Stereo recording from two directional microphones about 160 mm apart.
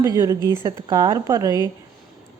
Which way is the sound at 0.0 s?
20° right (ahead or behind).